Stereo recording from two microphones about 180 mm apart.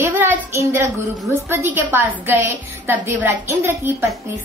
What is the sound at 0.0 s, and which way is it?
Child singing, 10° right (ahead or behind).